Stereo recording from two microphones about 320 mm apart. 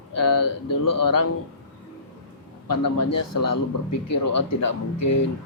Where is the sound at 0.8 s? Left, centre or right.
Left.